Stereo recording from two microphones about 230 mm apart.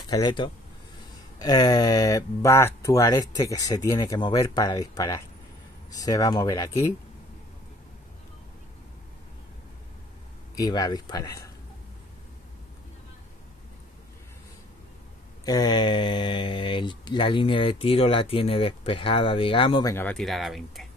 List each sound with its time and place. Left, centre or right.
0.1 s speech: centre
10.5 s speech: centre
15.4 s speech: centre